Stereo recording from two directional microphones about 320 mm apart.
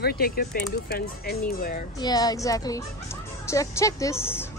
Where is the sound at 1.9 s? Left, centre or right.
Centre.